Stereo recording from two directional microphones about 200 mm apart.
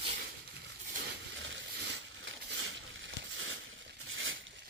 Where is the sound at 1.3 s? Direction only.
65° right (ahead or behind).